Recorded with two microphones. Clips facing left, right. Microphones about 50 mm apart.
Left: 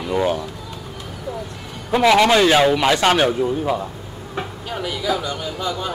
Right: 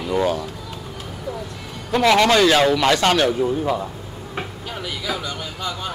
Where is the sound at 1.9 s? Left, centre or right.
Centre.